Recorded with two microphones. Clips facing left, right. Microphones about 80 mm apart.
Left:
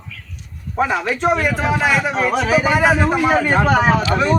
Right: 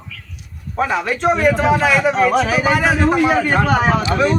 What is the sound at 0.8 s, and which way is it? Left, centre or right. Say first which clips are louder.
A man's voice: even; centre.